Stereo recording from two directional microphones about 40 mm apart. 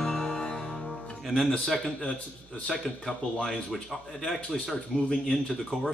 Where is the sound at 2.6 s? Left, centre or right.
Centre.